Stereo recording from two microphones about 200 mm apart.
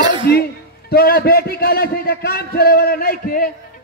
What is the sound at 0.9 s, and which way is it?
A man's voice, 50° left (ahead or behind).